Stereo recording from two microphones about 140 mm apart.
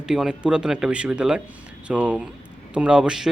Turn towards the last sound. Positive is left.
turn(degrees=-5)  # may be behind; listen again after turning